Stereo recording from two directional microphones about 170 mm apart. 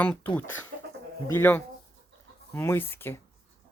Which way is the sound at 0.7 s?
90° right.